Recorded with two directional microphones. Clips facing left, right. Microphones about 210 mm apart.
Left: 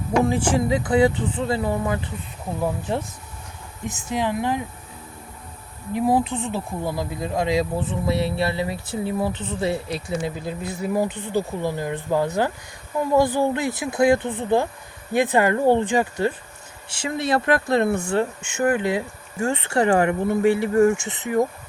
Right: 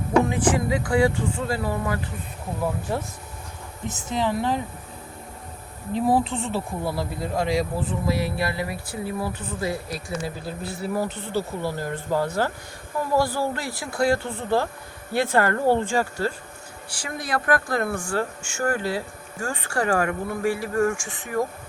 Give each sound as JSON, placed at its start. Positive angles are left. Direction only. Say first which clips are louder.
{"t": 0.3, "sound": "speech", "louder": "left 2 dB", "side_deg": 25}
{"t": 4.1, "sound": "speech", "louder": "left 1 dB", "side_deg": 15}
{"t": 5.9, "sound": "speech", "louder": "left 1 dB", "side_deg": 15}